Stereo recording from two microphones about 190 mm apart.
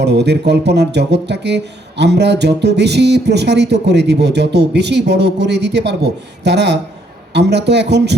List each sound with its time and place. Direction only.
0.0 s speech: 65° right (ahead or behind)